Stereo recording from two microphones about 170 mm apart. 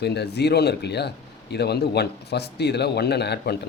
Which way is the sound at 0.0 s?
75° left (ahead or behind).